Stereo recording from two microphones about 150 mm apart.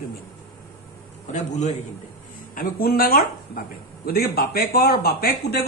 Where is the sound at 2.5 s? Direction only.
75° left (ahead or behind).